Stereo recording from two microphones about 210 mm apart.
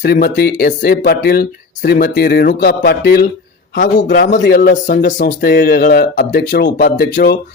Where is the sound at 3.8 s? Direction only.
40° left (ahead or behind).